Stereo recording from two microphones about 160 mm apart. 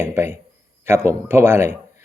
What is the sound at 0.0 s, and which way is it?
Speech, 15° right (ahead or behind).